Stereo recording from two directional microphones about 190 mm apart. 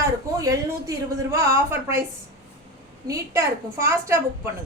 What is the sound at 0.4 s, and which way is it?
Speech, 15° right (ahead or behind).